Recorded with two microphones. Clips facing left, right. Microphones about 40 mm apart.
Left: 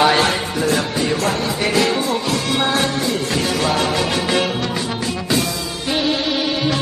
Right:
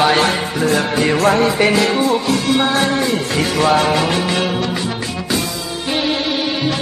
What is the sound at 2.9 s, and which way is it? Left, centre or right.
Music, right.